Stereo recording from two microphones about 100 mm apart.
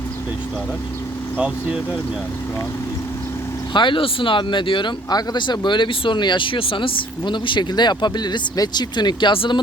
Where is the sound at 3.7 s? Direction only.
55° left (ahead or behind).